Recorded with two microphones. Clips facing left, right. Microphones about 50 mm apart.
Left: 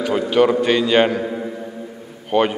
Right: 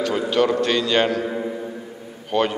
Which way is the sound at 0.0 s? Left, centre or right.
Centre.